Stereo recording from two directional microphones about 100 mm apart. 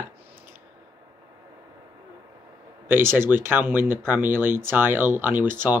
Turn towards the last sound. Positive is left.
turn(degrees=-20)  # may be behind; listen again after turning